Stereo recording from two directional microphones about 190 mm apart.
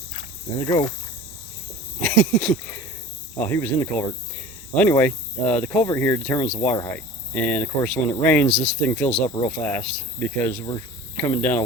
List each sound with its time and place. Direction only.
0.6 s speech: 25° left (ahead or behind)
2.0 s speech: 5° left (ahead or behind)
11.3 s speech: 10° left (ahead or behind)